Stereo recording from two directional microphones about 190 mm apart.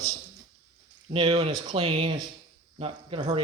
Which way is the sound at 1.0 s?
30° right (ahead or behind).